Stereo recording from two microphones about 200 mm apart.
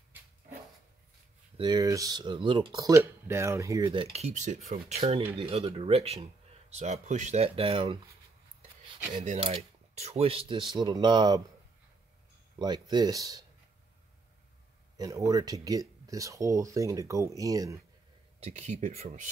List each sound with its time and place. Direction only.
1.6 s speech: 20° right (ahead or behind)
9.1 s speech: 30° right (ahead or behind)
12.5 s speech: 20° right (ahead or behind)
15.0 s speech: 15° right (ahead or behind)
18.4 s speech: 35° right (ahead or behind)